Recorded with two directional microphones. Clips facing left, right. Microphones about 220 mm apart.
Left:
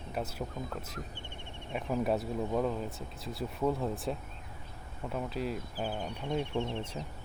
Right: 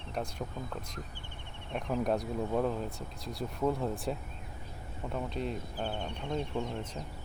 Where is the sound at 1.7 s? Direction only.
5° left (ahead or behind).